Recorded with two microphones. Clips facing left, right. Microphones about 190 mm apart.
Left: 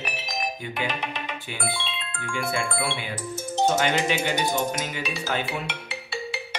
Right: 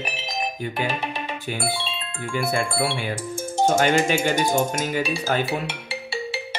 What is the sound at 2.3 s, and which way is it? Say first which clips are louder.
Speech: right 4 dB; 40° right (ahead or behind).